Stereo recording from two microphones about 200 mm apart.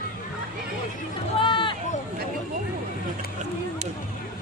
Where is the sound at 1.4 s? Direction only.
25° left (ahead or behind).